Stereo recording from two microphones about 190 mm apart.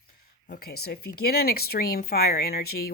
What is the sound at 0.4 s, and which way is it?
Speech, 55° left (ahead or behind).